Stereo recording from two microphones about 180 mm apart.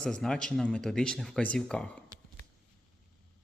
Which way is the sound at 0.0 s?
5° left (ahead or behind).